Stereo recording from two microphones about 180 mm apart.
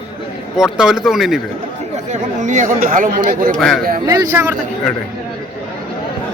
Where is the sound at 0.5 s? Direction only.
5° right (ahead or behind).